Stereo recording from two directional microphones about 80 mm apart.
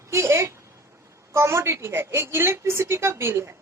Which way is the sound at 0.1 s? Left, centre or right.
Right.